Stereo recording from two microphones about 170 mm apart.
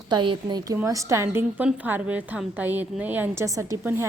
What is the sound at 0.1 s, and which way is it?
A woman's voice, 25° right (ahead or behind).